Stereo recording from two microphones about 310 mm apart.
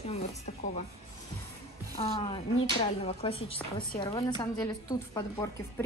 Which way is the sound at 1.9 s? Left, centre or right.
Centre.